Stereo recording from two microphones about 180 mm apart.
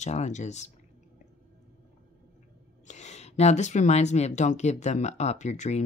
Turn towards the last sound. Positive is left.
turn(degrees=40)  # may be behind; listen again after turning